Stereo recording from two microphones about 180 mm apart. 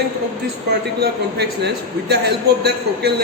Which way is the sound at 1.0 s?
70° right (ahead or behind).